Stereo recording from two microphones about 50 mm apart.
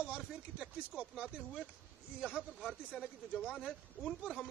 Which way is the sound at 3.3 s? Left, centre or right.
Centre.